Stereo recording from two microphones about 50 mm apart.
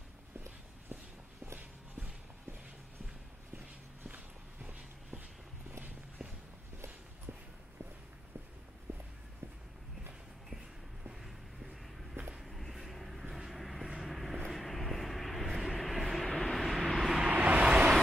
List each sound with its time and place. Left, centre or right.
1.6 s a sound: right
3.5 s walk: right
7.3 s walk: right
8.9 s walk: right
11.2 s a sound: centre
12.3 s vehicle: centre
17.3 s vehicle: right